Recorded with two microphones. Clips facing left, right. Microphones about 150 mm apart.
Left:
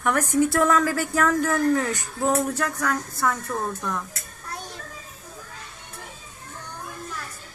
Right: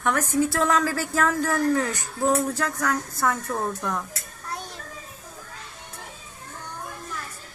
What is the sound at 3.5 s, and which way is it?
Speech, 10° right (ahead or behind).